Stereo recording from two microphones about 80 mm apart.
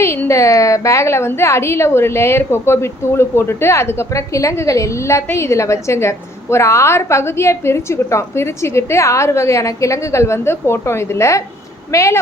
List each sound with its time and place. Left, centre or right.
0.3 s a woman's voice: left